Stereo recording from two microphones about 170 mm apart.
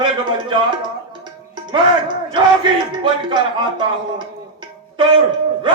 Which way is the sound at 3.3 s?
25° right (ahead or behind).